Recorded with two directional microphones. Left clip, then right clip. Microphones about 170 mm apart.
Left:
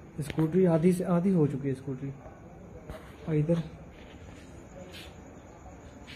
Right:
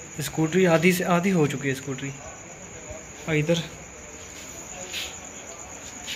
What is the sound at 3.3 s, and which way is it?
Speech, centre (ahead or behind).